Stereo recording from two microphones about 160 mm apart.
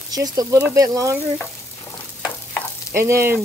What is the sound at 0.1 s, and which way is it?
Speech, 25° right (ahead or behind).